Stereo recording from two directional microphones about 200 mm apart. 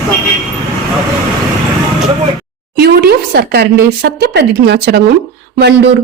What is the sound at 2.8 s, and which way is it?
Speech, 50° right (ahead or behind).